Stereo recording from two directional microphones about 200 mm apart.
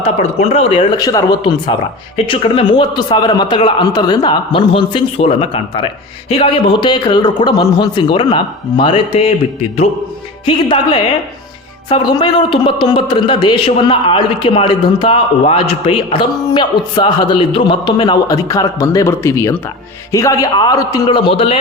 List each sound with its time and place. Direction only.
0.0 s a man's voice: 30° left (ahead or behind)
10.4 s a man's voice: 25° left (ahead or behind)